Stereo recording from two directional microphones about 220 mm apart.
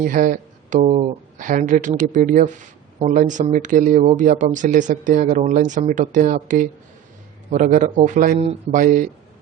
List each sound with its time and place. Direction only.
0.0 s speech: 40° right (ahead or behind)